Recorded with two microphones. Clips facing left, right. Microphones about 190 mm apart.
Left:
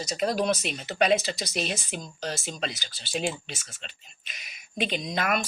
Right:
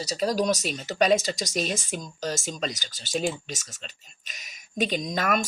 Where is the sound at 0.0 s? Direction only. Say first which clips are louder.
Right 1 dB; 35° right (ahead or behind).